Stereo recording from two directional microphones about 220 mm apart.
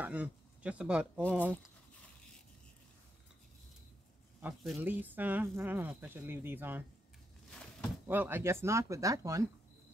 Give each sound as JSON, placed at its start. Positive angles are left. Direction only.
{"t": 0.0, "sound": "speech", "side_deg": -5}
{"t": 4.4, "sound": "speech", "side_deg": -5}
{"t": 8.1, "sound": "speech", "side_deg": -10}